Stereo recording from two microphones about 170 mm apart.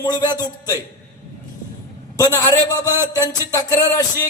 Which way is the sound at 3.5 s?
20° left (ahead or behind).